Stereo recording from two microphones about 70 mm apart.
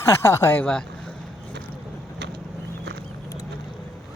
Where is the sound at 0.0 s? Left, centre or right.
Left.